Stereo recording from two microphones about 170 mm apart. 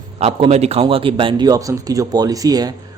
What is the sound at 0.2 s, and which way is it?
A man's voice, 35° right (ahead or behind).